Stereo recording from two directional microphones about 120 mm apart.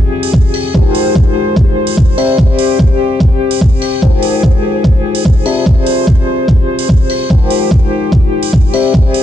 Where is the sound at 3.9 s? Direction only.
50° right (ahead or behind).